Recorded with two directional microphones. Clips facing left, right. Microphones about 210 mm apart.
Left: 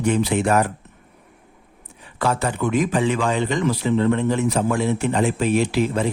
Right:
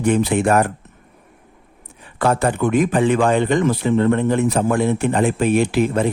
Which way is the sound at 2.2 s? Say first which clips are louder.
Right 4 dB; 55° right (ahead or behind).